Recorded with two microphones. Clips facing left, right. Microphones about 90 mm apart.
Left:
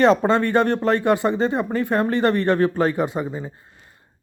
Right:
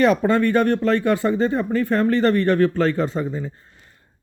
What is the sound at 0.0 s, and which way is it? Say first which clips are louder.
Speech: left 1 dB; 30° left (ahead or behind).